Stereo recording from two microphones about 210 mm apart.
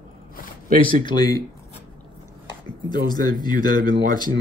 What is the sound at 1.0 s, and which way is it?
Speech, 20° left (ahead or behind).